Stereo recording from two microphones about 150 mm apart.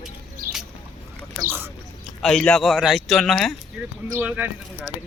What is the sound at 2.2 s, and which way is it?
Speech, 5° left (ahead or behind).